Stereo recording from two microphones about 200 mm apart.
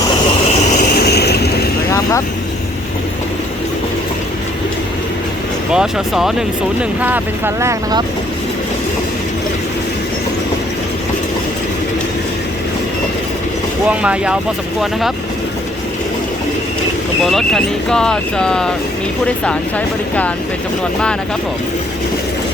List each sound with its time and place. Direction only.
0.8 s a sound: 50° left (ahead or behind)
5.7 s speech: 5° right (ahead or behind)
13.9 s speech: 5° right (ahead or behind)
17.2 s speech: centre (ahead or behind)